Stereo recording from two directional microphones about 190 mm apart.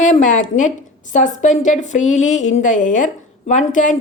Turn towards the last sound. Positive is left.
turn(degrees=40)  # may be behind; listen again after turning